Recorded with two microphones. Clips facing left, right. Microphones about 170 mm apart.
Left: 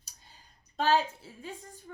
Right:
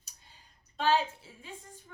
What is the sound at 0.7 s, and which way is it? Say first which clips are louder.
A woman's voice: left 1 dB; 40° left (ahead or behind).